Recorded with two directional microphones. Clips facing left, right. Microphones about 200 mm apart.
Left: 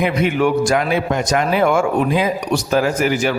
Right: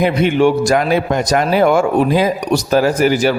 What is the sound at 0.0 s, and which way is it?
A man's voice, 30° right (ahead or behind).